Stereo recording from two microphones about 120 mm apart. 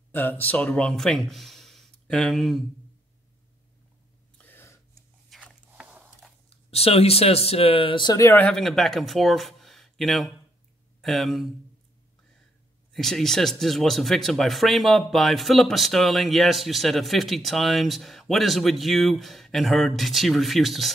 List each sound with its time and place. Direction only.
0.1 s speech: 15° left (ahead or behind); by 2.6 s centre (ahead or behind)
4.4 s gasp: 15° left (ahead or behind)
5.3 s a sound: centre (ahead or behind)
6.5 s speech: 55° left (ahead or behind); by 8.2 s 40° left (ahead or behind)
8.4 s speech: 5° left (ahead or behind)
12.9 s speech: 5° left (ahead or behind)